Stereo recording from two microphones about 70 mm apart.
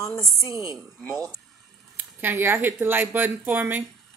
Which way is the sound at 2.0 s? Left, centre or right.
Right.